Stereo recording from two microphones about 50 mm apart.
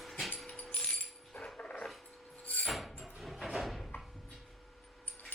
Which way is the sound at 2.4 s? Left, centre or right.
Left.